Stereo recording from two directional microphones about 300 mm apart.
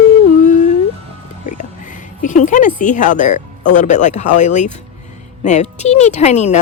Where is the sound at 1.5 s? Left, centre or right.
Left.